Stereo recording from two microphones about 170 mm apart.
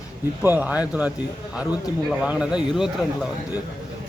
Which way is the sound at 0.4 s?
10° right (ahead or behind).